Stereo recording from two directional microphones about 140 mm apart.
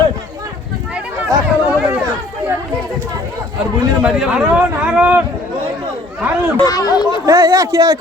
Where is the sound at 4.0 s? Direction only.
5° right (ahead or behind).